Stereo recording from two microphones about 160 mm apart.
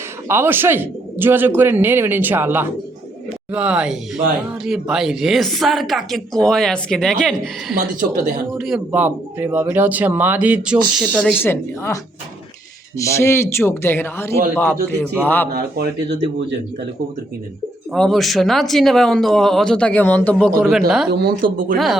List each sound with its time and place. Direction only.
0.3 s speech: 15° right (ahead or behind); by 7.8 s centre (ahead or behind)
7.9 s speech: 55° right (ahead or behind)
8.5 s speech: centre (ahead or behind)
11.3 s speech: 15° left (ahead or behind)
13.0 s speech: 15° left (ahead or behind)
15.5 s speech: 80° right
17.9 s speech: centre (ahead or behind)
21.1 s speech: 75° right (ahead or behind)